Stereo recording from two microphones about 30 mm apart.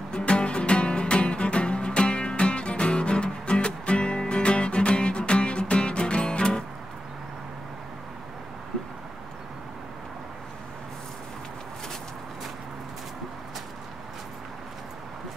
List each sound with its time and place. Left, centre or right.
0.3 s music: left